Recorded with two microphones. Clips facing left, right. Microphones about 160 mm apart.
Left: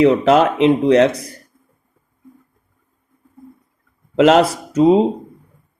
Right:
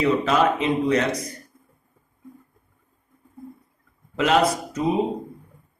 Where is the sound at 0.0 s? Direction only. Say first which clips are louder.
Left 7 dB; 75° left (ahead or behind).